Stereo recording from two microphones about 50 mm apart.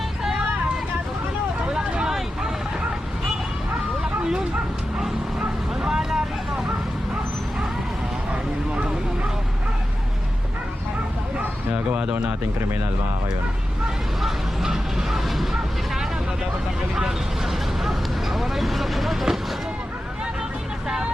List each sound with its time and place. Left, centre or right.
1.6 s vehicle: centre
5.4 s vehicle: centre
8.3 s a sound: right
11.7 s a sound: right
14.2 s speech: centre
16.9 s vehicle: centre